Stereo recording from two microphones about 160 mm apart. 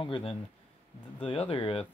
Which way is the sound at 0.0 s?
35° left (ahead or behind).